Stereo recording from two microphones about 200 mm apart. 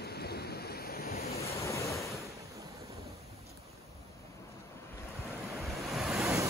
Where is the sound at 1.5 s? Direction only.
15° left (ahead or behind).